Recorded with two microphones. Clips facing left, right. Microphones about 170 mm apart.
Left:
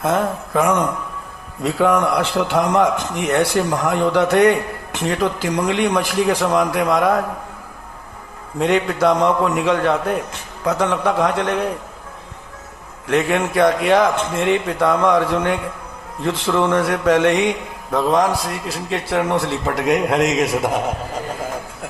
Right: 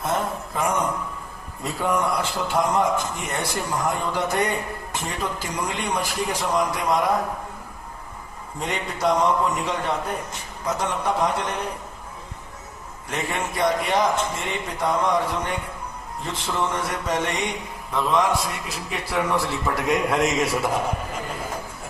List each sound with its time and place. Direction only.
0.0 s a man's voice: 75° left (ahead or behind)
8.5 s a man's voice: 75° left (ahead or behind)
13.1 s a man's voice: 70° left (ahead or behind)
17.9 s a man's voice: 40° left (ahead or behind)
19.4 s speech: 65° left (ahead or behind)
20.1 s a man's voice: 20° left (ahead or behind)